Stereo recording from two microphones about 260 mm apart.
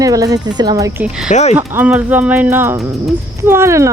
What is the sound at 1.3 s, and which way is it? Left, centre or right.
Speech, left.